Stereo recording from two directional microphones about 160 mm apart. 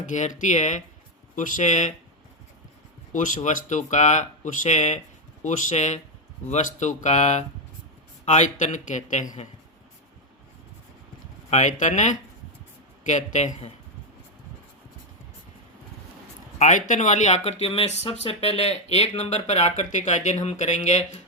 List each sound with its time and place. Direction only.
0.0 s speech: 50° left (ahead or behind)
3.1 s speech: 55° left (ahead or behind)
11.5 s speech: 45° left (ahead or behind)
16.6 s speech: 50° left (ahead or behind)